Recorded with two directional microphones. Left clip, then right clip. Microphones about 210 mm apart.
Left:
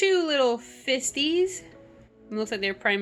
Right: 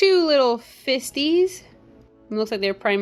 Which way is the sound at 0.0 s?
35° right (ahead or behind).